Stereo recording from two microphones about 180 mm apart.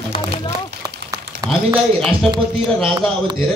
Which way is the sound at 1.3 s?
65° right (ahead or behind).